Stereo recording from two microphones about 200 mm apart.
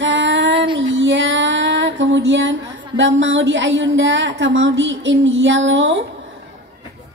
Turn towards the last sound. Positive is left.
turn(degrees=-65)  # may be behind; listen again after turning